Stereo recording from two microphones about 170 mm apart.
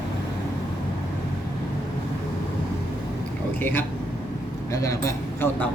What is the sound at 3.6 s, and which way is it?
Speech, 10° left (ahead or behind).